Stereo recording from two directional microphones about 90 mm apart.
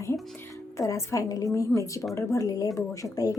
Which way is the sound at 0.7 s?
35° left (ahead or behind).